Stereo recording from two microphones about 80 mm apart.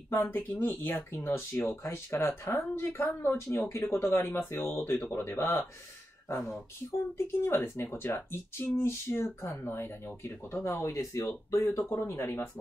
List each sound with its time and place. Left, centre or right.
0.1 s speech: left
7.2 s speech: left
10.9 s speech: left